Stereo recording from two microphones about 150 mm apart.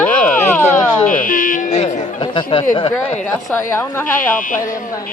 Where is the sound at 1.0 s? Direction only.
60° left (ahead or behind).